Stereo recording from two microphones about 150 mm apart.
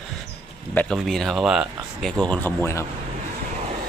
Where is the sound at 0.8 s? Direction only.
5° left (ahead or behind).